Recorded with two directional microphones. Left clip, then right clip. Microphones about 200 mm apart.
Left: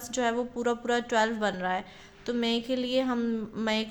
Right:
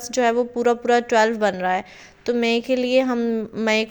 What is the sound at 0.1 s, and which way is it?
Speech, 30° right (ahead or behind).